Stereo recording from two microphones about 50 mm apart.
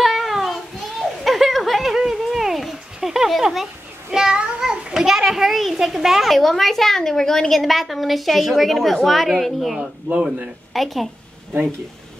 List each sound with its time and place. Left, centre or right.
0.0 s child singing: centre
1.2 s a sound: centre
4.1 s a child's voice: centre
9.8 s speech: centre
10.7 s speech: centre